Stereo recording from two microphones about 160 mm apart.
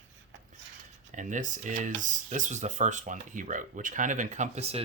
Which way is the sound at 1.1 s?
50° right (ahead or behind).